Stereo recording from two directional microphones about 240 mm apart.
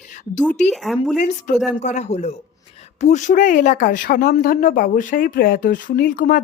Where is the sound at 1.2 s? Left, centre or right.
Left.